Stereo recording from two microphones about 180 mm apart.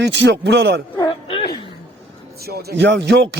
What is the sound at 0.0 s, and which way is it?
Speech, 70° right (ahead or behind).